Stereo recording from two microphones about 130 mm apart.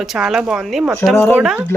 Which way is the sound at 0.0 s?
Centre (ahead or behind).